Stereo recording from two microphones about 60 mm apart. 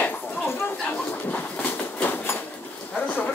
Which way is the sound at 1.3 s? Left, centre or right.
Left.